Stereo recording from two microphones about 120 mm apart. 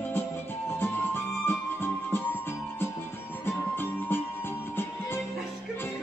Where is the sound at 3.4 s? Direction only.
20° left (ahead or behind).